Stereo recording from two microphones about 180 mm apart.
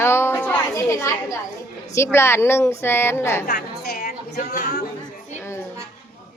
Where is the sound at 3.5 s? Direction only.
60° left (ahead or behind).